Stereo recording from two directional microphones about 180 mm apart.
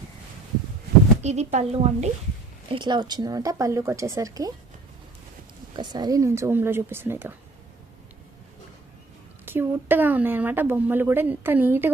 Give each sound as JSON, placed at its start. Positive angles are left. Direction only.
{"t": 1.2, "sound": "speech", "side_deg": -40}
{"t": 2.7, "sound": "speech", "side_deg": -25}
{"t": 5.7, "sound": "speech", "side_deg": -25}
{"t": 9.5, "sound": "speech", "side_deg": -10}